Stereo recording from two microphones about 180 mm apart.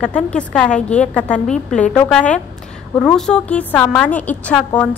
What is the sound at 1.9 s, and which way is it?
A woman's voice, 5° left (ahead or behind).